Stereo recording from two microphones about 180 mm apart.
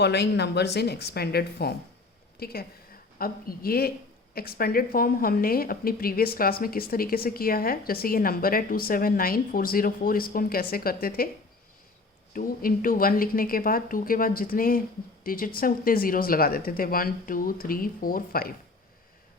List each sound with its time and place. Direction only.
0.0 s speech: 65° left (ahead or behind)
12.3 s speech: 50° left (ahead or behind)